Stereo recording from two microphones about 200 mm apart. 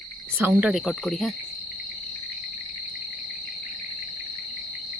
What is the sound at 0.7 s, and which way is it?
Speech, centre (ahead or behind).